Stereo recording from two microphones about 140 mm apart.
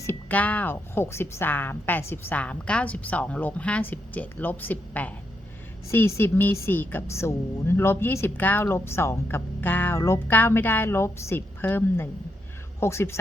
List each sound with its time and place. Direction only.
0.0 s a woman's voice: 15° left (ahead or behind)